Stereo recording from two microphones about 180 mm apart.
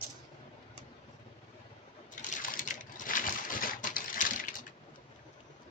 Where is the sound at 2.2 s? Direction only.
50° left (ahead or behind).